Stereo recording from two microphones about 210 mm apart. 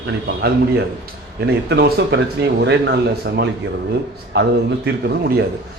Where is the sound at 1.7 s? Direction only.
50° right (ahead or behind).